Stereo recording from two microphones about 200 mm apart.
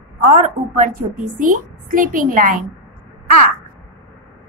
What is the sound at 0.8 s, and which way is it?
A woman's voice, 45° right (ahead or behind).